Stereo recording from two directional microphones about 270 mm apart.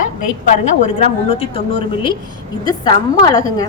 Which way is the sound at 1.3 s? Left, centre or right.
Left.